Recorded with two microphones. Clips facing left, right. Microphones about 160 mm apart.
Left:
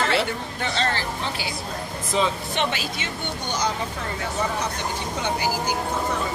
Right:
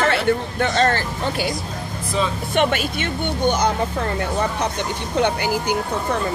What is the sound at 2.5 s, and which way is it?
Speech, 55° right (ahead or behind).